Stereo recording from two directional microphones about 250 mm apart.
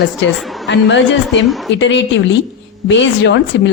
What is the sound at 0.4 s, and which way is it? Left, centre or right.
Speech, centre.